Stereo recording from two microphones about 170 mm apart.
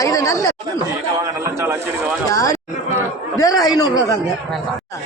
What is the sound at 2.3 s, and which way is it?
A man's voice, 20° left (ahead or behind).